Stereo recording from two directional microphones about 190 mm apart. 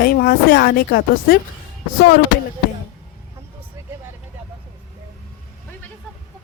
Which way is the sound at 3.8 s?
15° right (ahead or behind).